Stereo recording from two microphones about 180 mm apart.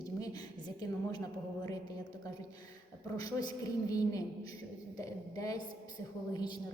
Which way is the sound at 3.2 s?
20° left (ahead or behind).